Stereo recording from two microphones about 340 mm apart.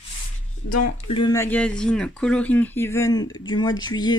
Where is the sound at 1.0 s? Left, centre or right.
Centre.